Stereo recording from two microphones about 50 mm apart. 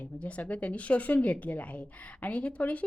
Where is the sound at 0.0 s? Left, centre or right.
Left.